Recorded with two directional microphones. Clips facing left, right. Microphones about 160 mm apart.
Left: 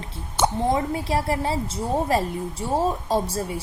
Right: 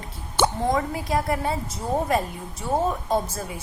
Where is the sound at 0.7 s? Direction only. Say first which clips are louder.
Left 1 dB; 30° left (ahead or behind).